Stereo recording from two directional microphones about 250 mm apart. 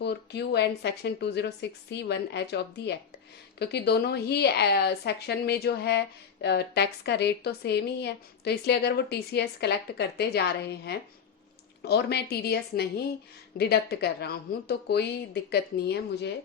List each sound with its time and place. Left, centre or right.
0.0 s a woman's voice: left